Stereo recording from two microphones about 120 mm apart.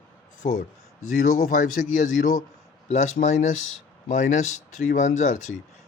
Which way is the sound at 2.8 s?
75° left (ahead or behind).